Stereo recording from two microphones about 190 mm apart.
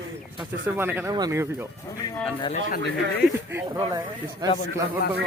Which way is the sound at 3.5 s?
15° right (ahead or behind).